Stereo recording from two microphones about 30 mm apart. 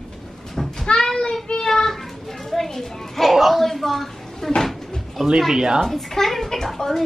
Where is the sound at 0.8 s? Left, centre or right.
Left.